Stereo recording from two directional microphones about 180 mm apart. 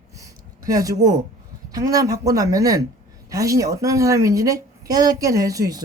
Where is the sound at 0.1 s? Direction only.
20° right (ahead or behind).